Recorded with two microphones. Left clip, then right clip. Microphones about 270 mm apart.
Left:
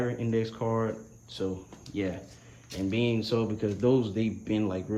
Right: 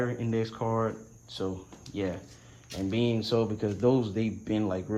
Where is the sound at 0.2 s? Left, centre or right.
Left.